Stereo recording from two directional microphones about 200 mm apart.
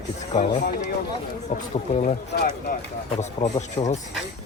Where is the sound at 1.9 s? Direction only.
35° left (ahead or behind).